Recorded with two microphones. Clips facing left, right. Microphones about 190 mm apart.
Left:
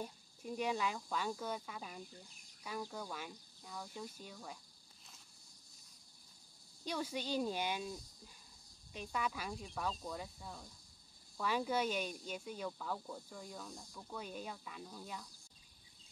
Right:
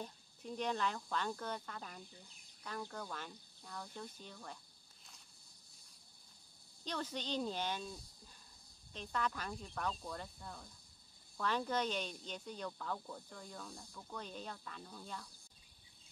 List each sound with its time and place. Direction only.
0.0 s speech: 10° left (ahead or behind)
6.8 s speech: 10° left (ahead or behind)